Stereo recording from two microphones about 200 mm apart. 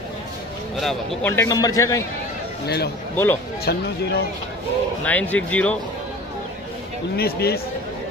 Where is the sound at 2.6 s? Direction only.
55° left (ahead or behind).